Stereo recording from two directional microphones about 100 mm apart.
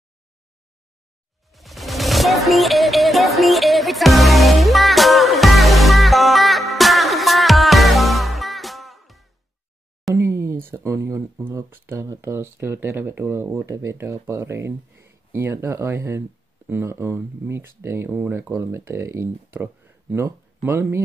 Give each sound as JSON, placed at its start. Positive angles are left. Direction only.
{"t": 1.5, "sound": "music", "side_deg": 0}
{"t": 10.1, "sound": "speech", "side_deg": -25}